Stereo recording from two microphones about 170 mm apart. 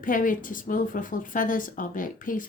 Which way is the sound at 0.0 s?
50° left (ahead or behind).